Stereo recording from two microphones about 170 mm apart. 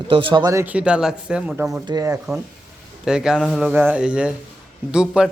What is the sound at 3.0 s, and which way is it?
Speech, 5° right (ahead or behind).